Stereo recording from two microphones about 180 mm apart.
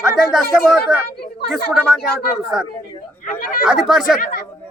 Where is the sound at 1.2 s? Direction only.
60° left (ahead or behind).